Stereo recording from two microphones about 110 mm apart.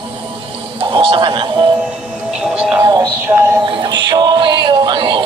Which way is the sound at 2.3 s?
5° right (ahead or behind).